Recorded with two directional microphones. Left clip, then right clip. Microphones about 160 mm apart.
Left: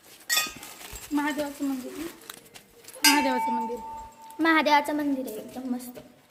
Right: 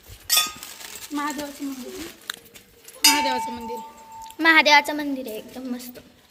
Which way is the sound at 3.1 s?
80° left.